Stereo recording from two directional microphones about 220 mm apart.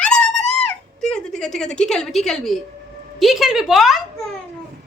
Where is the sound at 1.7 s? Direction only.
5° left (ahead or behind).